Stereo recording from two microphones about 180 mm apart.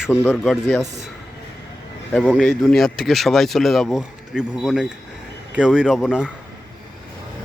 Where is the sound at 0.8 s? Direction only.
40° right (ahead or behind).